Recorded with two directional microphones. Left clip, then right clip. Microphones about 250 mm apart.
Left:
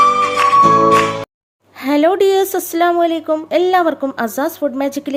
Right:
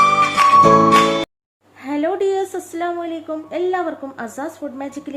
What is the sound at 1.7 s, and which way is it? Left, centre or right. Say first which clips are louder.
Speech: left 8 dB; left.